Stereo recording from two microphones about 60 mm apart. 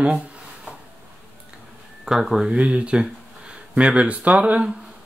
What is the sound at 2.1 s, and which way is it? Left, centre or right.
Speech, centre.